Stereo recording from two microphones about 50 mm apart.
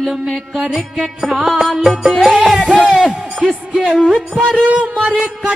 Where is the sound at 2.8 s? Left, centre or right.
Centre.